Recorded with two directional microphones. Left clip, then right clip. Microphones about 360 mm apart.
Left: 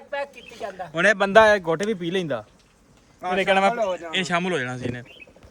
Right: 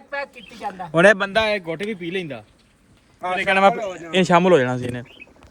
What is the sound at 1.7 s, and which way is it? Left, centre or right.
Speech, left.